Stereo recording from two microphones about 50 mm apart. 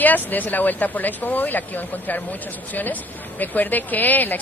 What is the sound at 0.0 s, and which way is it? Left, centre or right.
A woman's voice, left.